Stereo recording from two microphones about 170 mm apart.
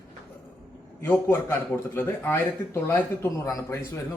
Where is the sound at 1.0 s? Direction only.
10° left (ahead or behind).